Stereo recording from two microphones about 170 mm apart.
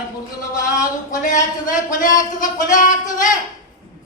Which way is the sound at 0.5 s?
50° left (ahead or behind).